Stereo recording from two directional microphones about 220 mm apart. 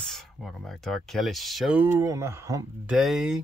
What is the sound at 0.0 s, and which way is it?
Speech, centre (ahead or behind).